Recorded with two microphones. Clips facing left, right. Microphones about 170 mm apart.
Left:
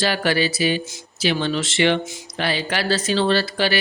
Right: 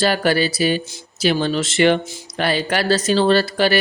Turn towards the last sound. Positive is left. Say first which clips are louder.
# right 4 dB
turn(degrees=-45)  # may be behind; listen again after turning